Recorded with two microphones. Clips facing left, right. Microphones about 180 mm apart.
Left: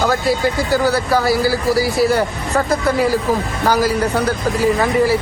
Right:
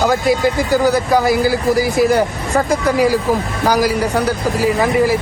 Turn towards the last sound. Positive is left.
turn(degrees=-10)  # may be behind; listen again after turning